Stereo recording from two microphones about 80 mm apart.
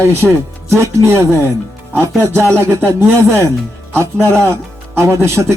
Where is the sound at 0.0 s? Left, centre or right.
Right.